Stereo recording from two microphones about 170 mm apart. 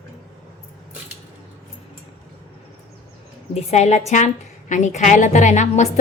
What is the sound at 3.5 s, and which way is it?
A woman's voice, 40° left (ahead or behind).